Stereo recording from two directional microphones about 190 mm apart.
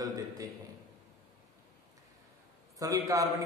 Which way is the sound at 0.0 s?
20° right (ahead or behind).